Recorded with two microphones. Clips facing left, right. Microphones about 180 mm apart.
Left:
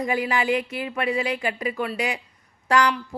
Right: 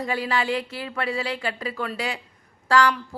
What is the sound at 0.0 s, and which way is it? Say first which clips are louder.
A woman's voice: left 2 dB; 15° left (ahead or behind).